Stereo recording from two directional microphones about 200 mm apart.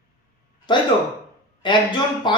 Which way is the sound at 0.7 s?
25° left (ahead or behind).